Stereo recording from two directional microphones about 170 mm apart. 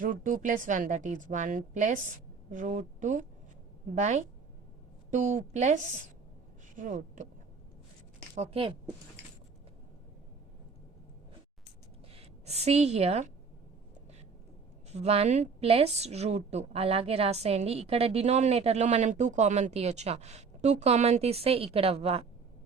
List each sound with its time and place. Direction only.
0.0 s a woman's voice: 55° right (ahead or behind)
6.7 s a woman's voice: 50° right (ahead or behind)
8.4 s a woman's voice: 35° right (ahead or behind)
12.5 s a woman's voice: 40° right (ahead or behind)
14.9 s a woman's voice: 40° right (ahead or behind)